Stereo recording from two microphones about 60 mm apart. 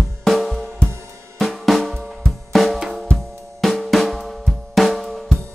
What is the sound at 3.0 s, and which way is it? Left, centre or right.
Music, centre.